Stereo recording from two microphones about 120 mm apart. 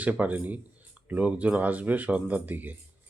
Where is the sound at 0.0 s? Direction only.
15° right (ahead or behind).